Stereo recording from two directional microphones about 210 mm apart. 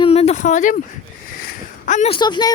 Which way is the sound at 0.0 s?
30° left (ahead or behind).